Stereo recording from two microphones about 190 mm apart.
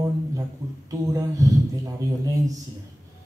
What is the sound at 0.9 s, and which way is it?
A man's voice, 20° right (ahead or behind).